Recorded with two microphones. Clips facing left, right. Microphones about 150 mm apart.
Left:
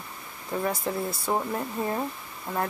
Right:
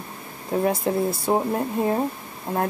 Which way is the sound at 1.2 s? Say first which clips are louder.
Right 6 dB; 25° right (ahead or behind).